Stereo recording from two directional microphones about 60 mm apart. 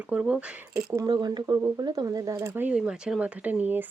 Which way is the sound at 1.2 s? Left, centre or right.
Right.